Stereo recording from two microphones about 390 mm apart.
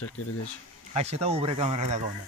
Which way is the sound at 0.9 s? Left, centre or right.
Centre.